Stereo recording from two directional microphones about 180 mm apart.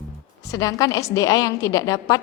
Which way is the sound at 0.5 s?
20° left (ahead or behind).